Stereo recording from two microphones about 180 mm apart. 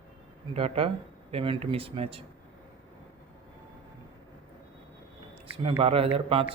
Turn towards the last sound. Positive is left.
turn(degrees=-30)  # may be behind; listen again after turning